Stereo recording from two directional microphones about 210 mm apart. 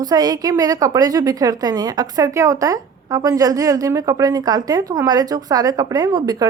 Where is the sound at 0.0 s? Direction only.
20° right (ahead or behind).